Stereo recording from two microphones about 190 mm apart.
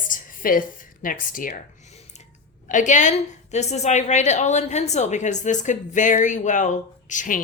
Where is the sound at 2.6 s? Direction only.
40° left (ahead or behind).